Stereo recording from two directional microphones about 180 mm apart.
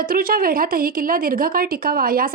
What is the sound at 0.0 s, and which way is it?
Speech, 55° right (ahead or behind).